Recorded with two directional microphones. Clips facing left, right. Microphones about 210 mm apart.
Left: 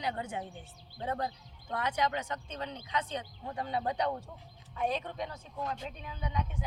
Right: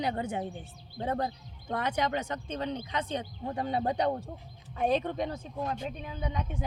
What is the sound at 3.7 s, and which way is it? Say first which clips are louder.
Speech: right 3 dB; 40° right (ahead or behind).